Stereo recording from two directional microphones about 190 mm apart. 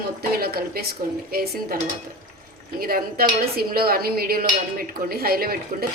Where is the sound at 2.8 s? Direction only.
50° right (ahead or behind).